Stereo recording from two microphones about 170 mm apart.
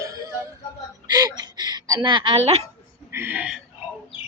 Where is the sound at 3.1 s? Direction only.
15° right (ahead or behind).